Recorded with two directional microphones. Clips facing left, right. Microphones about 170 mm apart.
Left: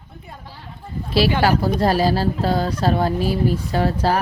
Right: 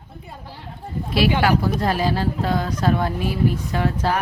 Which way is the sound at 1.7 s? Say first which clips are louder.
Left 3 dB; 35° left (ahead or behind).